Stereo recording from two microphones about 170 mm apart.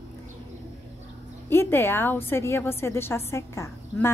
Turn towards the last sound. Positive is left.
turn(degrees=15)  # may be behind; listen again after turning